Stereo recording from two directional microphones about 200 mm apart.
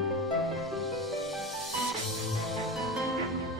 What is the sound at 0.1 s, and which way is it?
Music, centre (ahead or behind).